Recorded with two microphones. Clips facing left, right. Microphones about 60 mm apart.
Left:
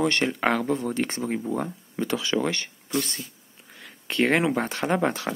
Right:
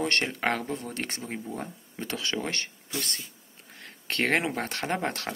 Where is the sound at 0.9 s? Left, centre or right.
Left.